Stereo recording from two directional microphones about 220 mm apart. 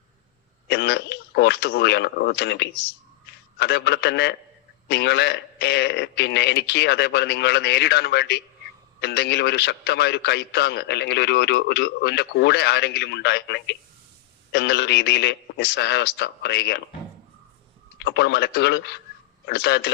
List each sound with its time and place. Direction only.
0.7 s a man's voice: 50° left (ahead or behind)
18.0 s a man's voice: 50° left (ahead or behind)